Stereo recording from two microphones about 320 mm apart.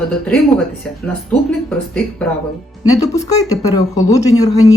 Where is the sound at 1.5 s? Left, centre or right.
Centre.